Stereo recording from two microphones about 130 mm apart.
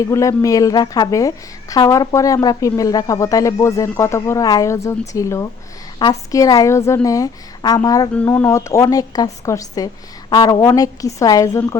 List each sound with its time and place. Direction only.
0.1 s speech: 25° left (ahead or behind)
8.1 s speech: 15° left (ahead or behind)